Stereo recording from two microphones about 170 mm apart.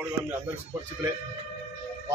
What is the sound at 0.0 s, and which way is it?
Speech, 10° right (ahead or behind).